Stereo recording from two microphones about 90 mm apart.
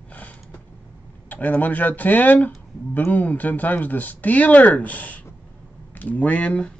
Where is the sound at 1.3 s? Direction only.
20° left (ahead or behind).